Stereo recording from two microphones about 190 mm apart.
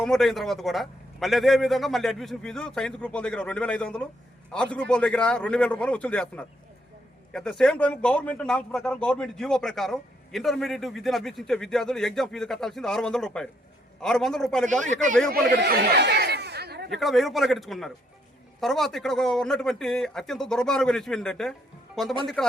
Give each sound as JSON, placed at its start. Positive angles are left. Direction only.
{"t": 0.0, "sound": "speech", "side_deg": 0}
{"t": 14.7, "sound": "a man's voice", "side_deg": -40}
{"t": 15.3, "sound": "speech", "side_deg": -55}
{"t": 16.9, "sound": "speech", "side_deg": 0}